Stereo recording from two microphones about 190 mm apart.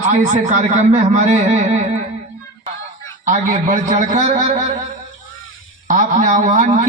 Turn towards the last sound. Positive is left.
turn(degrees=-40)  # may be behind; listen again after turning